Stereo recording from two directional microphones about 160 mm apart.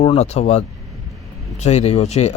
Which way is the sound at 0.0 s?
40° left (ahead or behind).